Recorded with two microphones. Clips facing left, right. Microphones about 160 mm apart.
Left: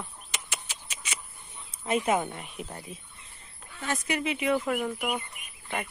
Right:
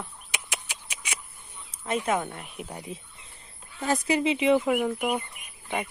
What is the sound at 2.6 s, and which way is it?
Speech, 15° right (ahead or behind).